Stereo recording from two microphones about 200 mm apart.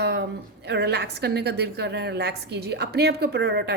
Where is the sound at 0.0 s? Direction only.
55° right (ahead or behind).